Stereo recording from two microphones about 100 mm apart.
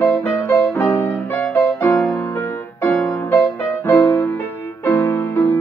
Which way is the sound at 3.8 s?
30° left (ahead or behind).